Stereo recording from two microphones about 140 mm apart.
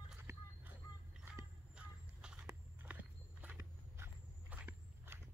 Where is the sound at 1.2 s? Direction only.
5° right (ahead or behind).